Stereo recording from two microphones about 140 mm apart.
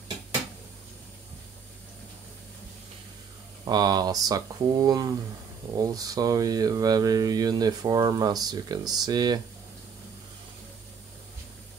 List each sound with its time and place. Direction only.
3.6 s speech: 30° right (ahead or behind)